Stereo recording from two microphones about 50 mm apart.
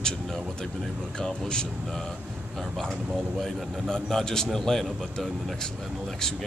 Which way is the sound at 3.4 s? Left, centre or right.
Centre.